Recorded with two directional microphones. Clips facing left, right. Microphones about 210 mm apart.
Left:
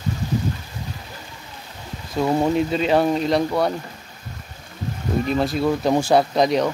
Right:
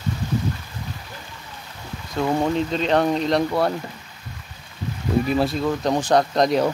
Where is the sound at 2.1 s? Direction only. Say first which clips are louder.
Left 2 dB; 10° left (ahead or behind).